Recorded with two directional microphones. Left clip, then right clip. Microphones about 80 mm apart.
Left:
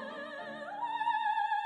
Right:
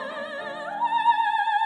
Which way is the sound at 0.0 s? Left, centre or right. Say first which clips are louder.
Right 9 dB; right.